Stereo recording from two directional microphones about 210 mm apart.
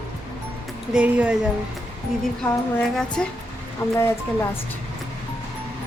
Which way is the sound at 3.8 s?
15° left (ahead or behind).